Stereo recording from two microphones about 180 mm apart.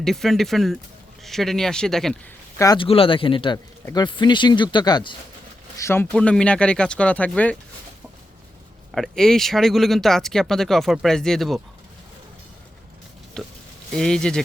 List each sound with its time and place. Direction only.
0.0 s speech: centre (ahead or behind)
2.6 s speech: 25° left (ahead or behind)
5.8 s speech: 10° left (ahead or behind)
8.9 s speech: centre (ahead or behind)
13.4 s speech: 5° left (ahead or behind)